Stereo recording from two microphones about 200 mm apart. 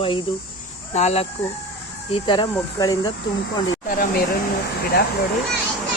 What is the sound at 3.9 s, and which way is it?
Speech, 45° left (ahead or behind).